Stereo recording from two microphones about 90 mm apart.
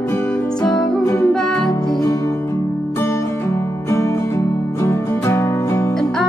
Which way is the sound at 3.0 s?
30° left (ahead or behind).